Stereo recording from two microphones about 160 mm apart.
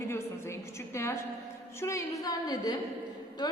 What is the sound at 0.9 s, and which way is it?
A woman's voice, 15° left (ahead or behind).